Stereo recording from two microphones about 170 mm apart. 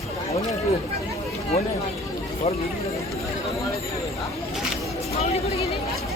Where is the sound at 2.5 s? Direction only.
35° left (ahead or behind).